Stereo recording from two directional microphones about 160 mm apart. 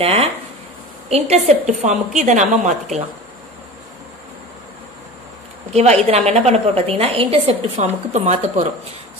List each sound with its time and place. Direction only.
0.0 s a woman's voice: 40° right (ahead or behind)
5.7 s a woman's voice: 45° right (ahead or behind)